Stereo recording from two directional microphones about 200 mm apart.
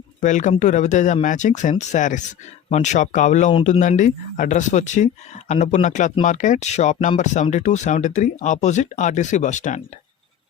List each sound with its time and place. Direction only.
0.2 s speech: 40° left (ahead or behind)